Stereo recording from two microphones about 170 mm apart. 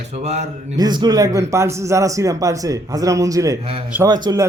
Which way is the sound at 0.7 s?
25° right (ahead or behind).